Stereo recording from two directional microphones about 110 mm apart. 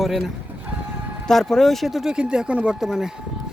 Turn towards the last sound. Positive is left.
turn(degrees=-5)  # may be behind; listen again after turning